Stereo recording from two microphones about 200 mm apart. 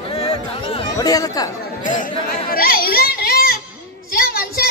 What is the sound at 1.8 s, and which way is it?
A child's voice, 40° left (ahead or behind).